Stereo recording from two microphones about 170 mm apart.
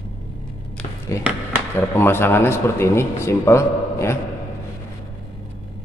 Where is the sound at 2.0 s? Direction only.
15° left (ahead or behind).